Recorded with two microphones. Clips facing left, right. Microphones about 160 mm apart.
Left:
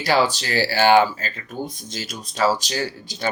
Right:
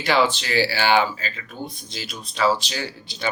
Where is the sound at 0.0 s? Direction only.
40° left (ahead or behind).